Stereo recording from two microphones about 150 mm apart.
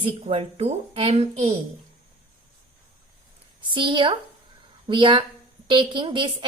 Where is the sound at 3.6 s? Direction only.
35° right (ahead or behind).